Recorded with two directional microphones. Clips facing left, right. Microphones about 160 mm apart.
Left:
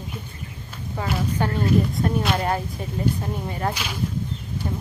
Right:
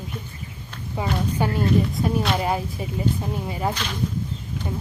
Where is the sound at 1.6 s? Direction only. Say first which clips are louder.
Left 2 dB; centre (ahead or behind).